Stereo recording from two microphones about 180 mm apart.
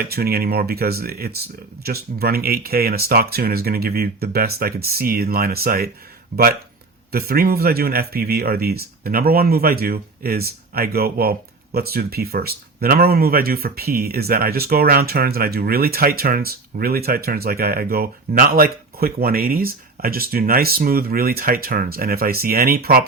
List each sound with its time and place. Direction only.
0.0 s speech: 60° right (ahead or behind)